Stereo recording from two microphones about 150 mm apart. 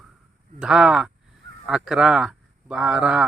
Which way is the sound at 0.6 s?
5° right (ahead or behind).